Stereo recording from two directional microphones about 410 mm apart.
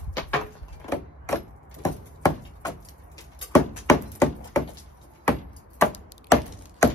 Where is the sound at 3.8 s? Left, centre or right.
Centre.